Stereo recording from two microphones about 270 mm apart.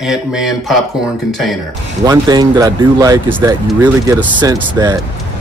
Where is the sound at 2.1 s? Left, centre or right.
Centre.